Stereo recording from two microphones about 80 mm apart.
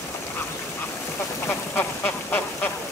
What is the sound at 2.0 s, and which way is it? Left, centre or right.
Duck, left.